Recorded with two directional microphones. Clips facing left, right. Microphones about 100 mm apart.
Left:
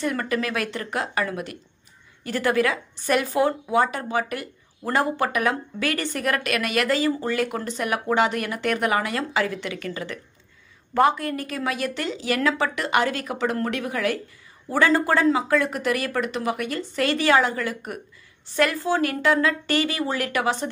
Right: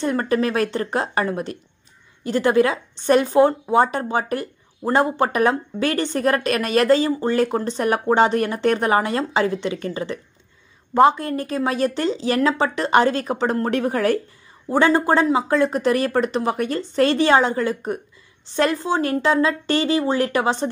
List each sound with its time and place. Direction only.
0.0 s speech: 30° right (ahead or behind)
14.7 s speech: 25° right (ahead or behind)